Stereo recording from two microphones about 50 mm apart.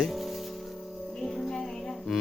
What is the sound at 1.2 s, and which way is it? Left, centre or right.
Music, centre.